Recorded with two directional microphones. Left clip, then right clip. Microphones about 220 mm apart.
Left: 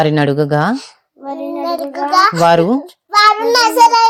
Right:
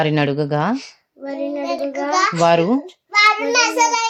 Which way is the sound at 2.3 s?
15° left (ahead or behind).